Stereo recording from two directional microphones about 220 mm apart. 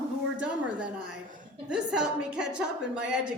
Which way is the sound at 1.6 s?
5° right (ahead or behind).